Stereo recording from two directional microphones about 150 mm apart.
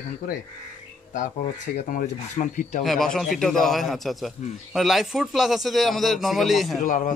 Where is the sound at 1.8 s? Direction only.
60° left (ahead or behind).